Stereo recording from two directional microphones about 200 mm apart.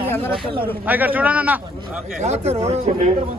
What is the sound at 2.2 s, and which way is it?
Speech, 35° right (ahead or behind).